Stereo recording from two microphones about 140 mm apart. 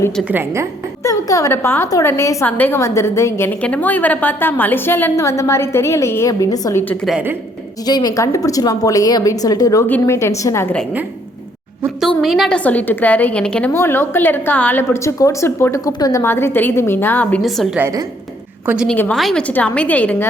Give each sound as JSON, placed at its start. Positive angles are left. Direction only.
{"t": 0.3, "sound": "a woman's voice", "side_deg": -15}
{"t": 1.0, "sound": "a woman's voice", "side_deg": 25}
{"t": 6.8, "sound": "a woman's voice", "side_deg": 10}
{"t": 7.1, "sound": "a woman's voice", "side_deg": -10}
{"t": 7.9, "sound": "a woman's voice", "side_deg": 30}
{"t": 11.9, "sound": "a woman's voice", "side_deg": 0}
{"t": 16.2, "sound": "a woman's voice", "side_deg": 15}
{"t": 17.7, "sound": "a woman's voice", "side_deg": -20}
{"t": 18.9, "sound": "a woman's voice", "side_deg": 10}